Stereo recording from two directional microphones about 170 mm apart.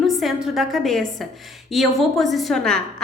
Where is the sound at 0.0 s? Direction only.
Centre (ahead or behind).